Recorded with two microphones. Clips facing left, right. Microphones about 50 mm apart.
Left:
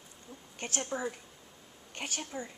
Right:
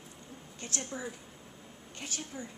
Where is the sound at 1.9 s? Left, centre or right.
Left.